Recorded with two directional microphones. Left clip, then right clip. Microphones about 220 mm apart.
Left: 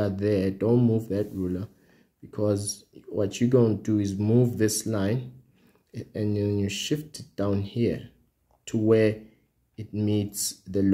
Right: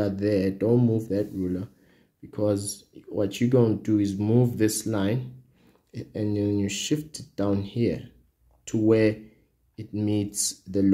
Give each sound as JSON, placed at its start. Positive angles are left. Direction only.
{"t": 0.0, "sound": "speech", "side_deg": 15}